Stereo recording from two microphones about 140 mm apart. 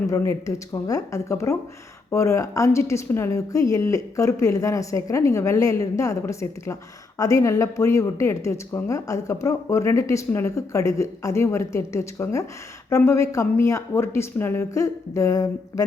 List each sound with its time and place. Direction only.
0.1 s a woman's voice: 20° left (ahead or behind)